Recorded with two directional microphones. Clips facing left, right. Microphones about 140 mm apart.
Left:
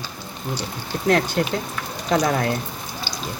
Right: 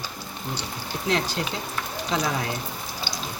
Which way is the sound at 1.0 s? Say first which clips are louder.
Left 7 dB; 55° left (ahead or behind).